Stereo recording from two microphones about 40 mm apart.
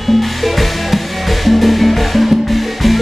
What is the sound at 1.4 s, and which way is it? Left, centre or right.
Music, centre.